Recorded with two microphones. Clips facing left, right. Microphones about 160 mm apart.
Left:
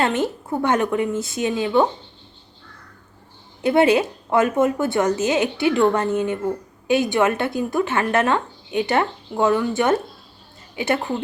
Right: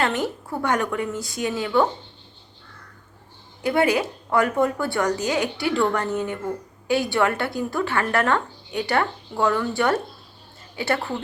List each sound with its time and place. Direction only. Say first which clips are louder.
0.0 s a woman's voice: left 3 dB; 20° left (ahead or behind)
3.6 s a woman's voice: left 4 dB; 25° left (ahead or behind)